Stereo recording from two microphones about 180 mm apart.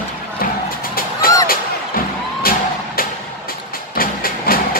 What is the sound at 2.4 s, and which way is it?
Music, 55° left (ahead or behind).